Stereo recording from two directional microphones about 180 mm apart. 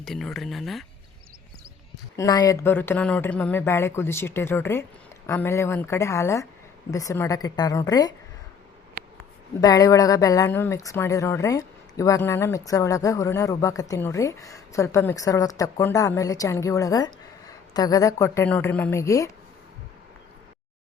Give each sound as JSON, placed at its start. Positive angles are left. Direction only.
{"t": 0.0, "sound": "speech", "side_deg": 0}
{"t": 2.1, "sound": "a woman's voice", "side_deg": 20}
{"t": 9.6, "sound": "a woman's voice", "side_deg": 20}